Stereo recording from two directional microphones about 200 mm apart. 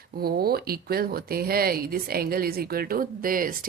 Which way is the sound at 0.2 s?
50° right (ahead or behind).